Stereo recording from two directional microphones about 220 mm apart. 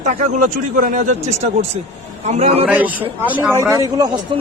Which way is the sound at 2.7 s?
5° right (ahead or behind).